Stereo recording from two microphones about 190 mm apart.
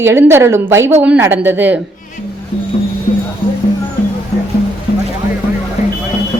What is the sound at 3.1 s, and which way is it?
Music, 30° left (ahead or behind).